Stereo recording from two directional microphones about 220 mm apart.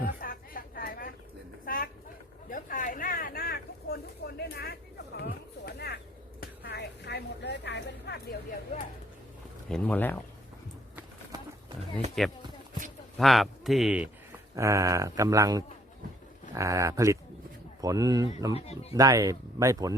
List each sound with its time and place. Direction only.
0.0 s a sound: 40° left (ahead or behind)
9.6 s speech: 5° left (ahead or behind)
12.2 s speech: centre (ahead or behind); by 18.5 s 15° right (ahead or behind)
18.5 s speech: 25° left (ahead or behind)
18.9 s speech: 15° right (ahead or behind)